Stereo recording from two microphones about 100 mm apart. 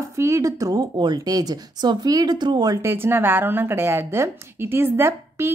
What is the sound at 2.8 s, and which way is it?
A woman's voice, 25° right (ahead or behind).